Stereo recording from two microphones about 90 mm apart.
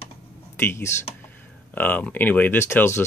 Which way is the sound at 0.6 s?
25° left (ahead or behind).